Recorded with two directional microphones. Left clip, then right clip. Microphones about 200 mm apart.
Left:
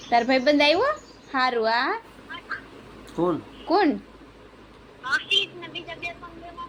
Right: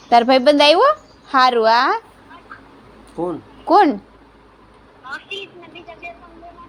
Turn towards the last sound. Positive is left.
turn(degrees=15)  # may be behind; listen again after turning